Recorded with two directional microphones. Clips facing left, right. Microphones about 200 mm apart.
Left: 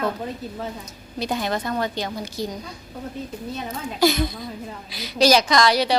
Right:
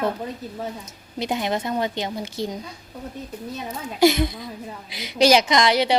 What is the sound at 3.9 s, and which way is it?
A woman's voice, 25° right (ahead or behind).